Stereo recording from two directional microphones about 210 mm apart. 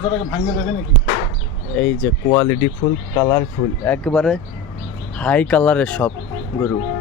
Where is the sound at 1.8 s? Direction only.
5° left (ahead or behind).